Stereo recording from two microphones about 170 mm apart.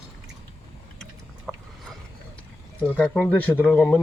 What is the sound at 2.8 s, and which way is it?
Speech, 5° left (ahead or behind).